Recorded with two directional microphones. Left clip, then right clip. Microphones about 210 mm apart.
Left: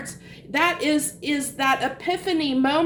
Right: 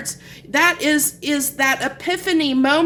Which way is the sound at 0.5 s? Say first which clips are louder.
Right 5 dB; 35° right (ahead or behind).